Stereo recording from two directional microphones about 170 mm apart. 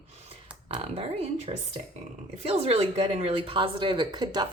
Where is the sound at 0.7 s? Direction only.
35° right (ahead or behind).